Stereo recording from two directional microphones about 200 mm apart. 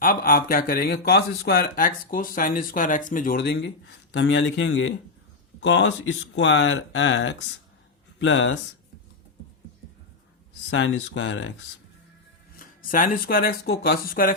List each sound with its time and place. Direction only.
0.0 s speech: 45° left (ahead or behind); by 8.5 s 70° left (ahead or behind)
10.7 s speech: 70° left (ahead or behind)
12.5 s speech: 45° left (ahead or behind)